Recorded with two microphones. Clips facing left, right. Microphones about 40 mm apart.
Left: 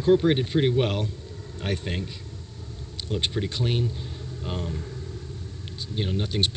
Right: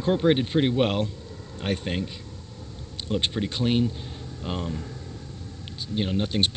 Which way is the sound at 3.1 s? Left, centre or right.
Centre.